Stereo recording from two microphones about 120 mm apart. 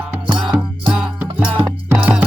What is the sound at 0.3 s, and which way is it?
Music, 40° right (ahead or behind).